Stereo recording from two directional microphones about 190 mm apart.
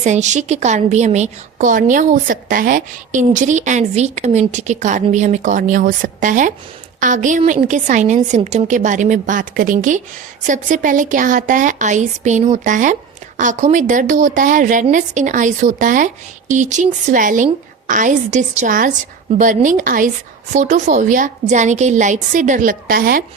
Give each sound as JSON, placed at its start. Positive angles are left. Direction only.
{"t": 0.0, "sound": "a woman's voice", "side_deg": -40}